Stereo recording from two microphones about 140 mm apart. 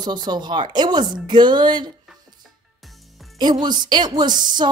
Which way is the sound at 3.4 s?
30° right (ahead or behind).